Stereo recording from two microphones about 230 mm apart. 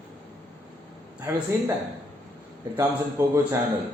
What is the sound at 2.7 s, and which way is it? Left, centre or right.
Speech, centre.